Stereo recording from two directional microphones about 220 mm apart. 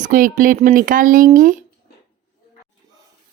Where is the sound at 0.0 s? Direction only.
35° right (ahead or behind).